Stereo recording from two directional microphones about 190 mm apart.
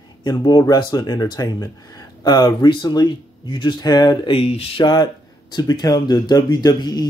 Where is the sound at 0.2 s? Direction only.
20° left (ahead or behind).